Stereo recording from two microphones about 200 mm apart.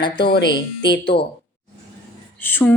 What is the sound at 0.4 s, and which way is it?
Speech, 20° left (ahead or behind).